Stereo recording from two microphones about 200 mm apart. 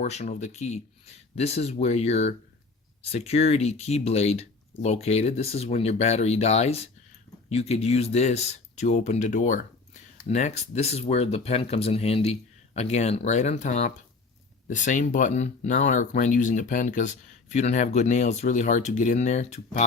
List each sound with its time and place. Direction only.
0.0 s speech: 35° left (ahead or behind)